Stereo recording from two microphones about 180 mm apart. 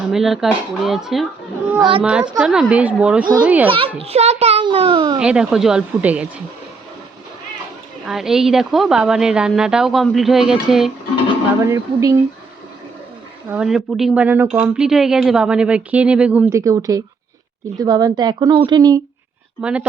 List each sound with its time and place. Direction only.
0.1 s a woman's voice: centre (ahead or behind)
3.7 s a child's voice: 30° right (ahead or behind)
5.2 s a woman's voice: 5° right (ahead or behind)
8.0 s a woman's voice: centre (ahead or behind)
11.6 s speech: 15° right (ahead or behind)
13.5 s a woman's voice: 5° right (ahead or behind); by 19.0 s 20° right (ahead or behind)
19.6 s a woman's voice: 5° right (ahead or behind)